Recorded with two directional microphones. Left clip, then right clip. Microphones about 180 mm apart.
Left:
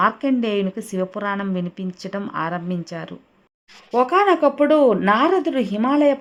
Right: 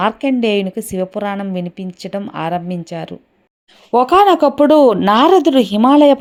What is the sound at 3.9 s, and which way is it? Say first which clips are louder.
Speech: right 6 dB; 35° right (ahead or behind).